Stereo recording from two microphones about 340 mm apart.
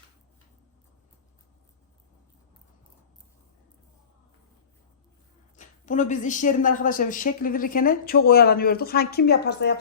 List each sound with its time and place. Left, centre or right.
5.5 s speech: left